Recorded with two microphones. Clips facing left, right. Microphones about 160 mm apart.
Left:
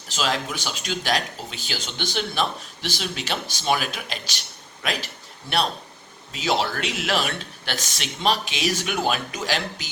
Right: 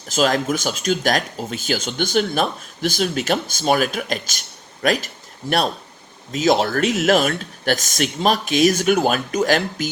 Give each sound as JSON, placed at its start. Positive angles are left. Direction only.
{"t": 0.1, "sound": "speech", "side_deg": -45}